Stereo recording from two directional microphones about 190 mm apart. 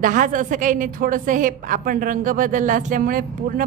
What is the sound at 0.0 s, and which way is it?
A woman's voice, 45° right (ahead or behind).